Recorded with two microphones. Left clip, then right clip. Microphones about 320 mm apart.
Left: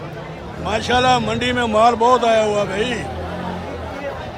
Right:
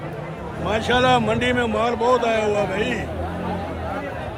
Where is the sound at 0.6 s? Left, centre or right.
Centre.